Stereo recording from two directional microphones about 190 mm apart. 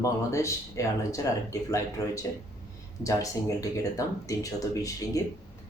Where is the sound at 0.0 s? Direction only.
15° left (ahead or behind).